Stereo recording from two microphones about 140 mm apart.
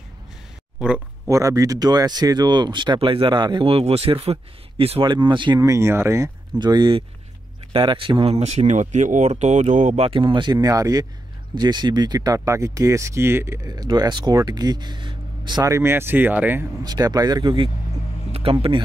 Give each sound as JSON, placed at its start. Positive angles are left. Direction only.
{"t": 0.7, "sound": "speech", "side_deg": -10}
{"t": 1.3, "sound": "speech", "side_deg": -25}
{"t": 5.6, "sound": "speech", "side_deg": -20}
{"t": 6.6, "sound": "speech", "side_deg": -30}
{"t": 10.0, "sound": "speech", "side_deg": -35}
{"t": 15.7, "sound": "speech", "side_deg": -15}
{"t": 16.8, "sound": "speech", "side_deg": -30}
{"t": 18.3, "sound": "speech", "side_deg": -45}